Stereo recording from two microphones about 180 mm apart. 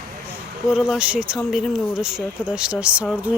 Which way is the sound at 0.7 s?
5° right (ahead or behind).